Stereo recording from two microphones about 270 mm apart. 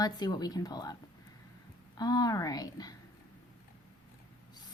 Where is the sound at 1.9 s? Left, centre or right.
Centre.